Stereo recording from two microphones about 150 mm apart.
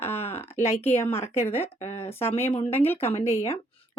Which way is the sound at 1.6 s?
45° left (ahead or behind).